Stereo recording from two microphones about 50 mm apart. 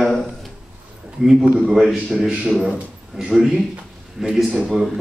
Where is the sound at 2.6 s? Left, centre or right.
Centre.